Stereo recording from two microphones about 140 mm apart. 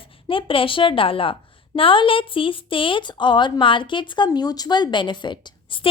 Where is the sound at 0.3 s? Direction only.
40° left (ahead or behind).